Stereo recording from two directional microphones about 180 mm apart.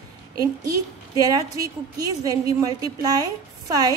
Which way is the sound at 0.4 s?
20° right (ahead or behind).